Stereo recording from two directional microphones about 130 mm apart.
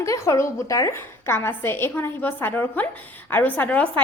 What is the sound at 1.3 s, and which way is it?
A woman's voice, 15° left (ahead or behind).